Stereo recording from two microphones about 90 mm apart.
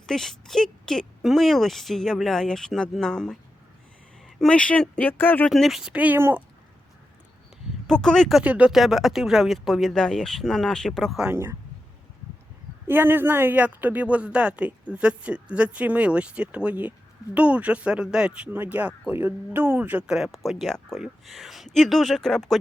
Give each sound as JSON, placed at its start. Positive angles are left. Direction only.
{"t": 0.0, "sound": "a woman's voice", "side_deg": 5}
{"t": 4.4, "sound": "speech", "side_deg": 10}
{"t": 5.5, "sound": "a woman's voice", "side_deg": 0}
{"t": 5.9, "sound": "speech", "side_deg": -15}
{"t": 7.9, "sound": "a woman's voice", "side_deg": 5}
{"t": 8.4, "sound": "a woman's voice", "side_deg": -10}
{"t": 12.9, "sound": "speech", "side_deg": -25}
{"t": 20.1, "sound": "a woman's voice", "side_deg": -5}